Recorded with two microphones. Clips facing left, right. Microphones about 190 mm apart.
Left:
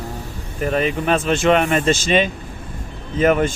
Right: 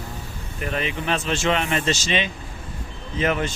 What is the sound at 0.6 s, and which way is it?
Speech, 45° left (ahead or behind).